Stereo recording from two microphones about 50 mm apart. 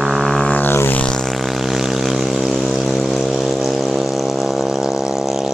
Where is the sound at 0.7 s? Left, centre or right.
Left.